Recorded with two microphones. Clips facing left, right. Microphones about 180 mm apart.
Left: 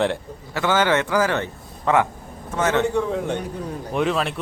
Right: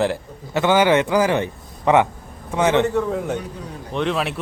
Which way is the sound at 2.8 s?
5° right (ahead or behind).